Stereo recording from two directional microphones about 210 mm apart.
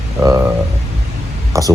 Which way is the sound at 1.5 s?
15° right (ahead or behind).